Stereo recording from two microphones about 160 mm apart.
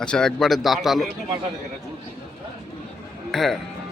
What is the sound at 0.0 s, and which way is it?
A man's voice, 5° left (ahead or behind).